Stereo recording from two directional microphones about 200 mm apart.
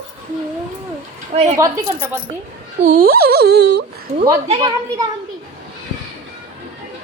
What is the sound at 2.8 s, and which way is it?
Speech, 45° right (ahead or behind).